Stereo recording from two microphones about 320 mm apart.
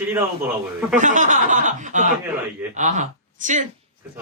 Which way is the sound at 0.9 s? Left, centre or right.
Right.